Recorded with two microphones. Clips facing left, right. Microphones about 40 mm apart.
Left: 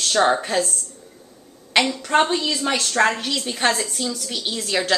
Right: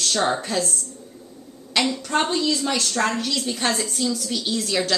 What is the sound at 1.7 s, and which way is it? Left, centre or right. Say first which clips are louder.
A woman's voice: left 4 dB; left.